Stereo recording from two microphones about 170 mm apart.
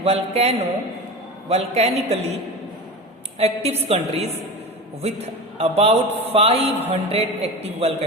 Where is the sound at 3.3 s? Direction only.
40° right (ahead or behind).